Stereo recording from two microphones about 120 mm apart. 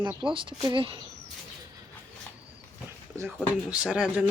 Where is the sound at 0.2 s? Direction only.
45° right (ahead or behind).